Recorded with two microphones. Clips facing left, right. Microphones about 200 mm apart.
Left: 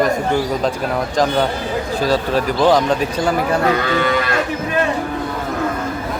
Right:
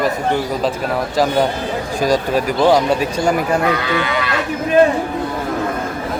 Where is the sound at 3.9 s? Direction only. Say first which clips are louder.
Left 2 dB; 45° left (ahead or behind).